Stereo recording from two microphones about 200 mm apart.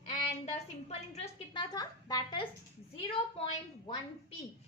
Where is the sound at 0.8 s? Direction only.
35° left (ahead or behind).